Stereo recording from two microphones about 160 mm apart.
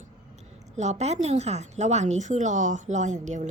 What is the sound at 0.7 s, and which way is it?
A woman's voice, 45° right (ahead or behind).